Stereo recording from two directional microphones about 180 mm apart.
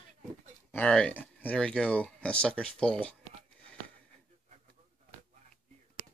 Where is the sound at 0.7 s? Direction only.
5° left (ahead or behind).